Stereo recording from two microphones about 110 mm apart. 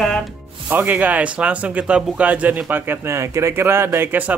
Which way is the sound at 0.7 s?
15° right (ahead or behind).